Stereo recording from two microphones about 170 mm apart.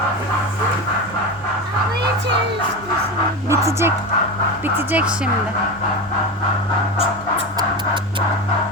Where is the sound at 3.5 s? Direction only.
15° right (ahead or behind).